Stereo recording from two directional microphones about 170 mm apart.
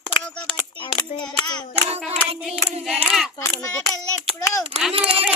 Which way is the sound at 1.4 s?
25° left (ahead or behind).